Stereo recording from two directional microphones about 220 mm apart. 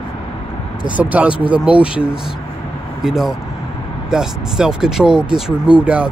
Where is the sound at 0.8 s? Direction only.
5° right (ahead or behind).